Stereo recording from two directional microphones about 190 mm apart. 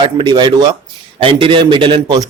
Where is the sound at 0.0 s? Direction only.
25° right (ahead or behind).